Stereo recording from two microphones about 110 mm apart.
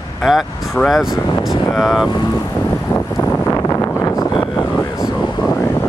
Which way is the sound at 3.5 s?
25° left (ahead or behind).